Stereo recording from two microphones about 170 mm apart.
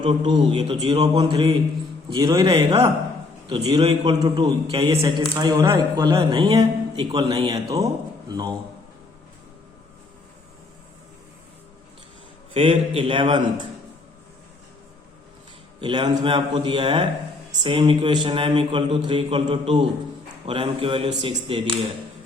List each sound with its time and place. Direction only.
0.0 s a man's voice: 30° right (ahead or behind)
12.5 s a man's voice: 35° right (ahead or behind)
15.8 s a man's voice: 25° right (ahead or behind)